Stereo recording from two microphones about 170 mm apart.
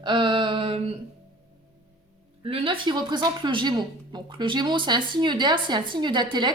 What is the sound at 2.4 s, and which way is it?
A woman's voice, 30° right (ahead or behind).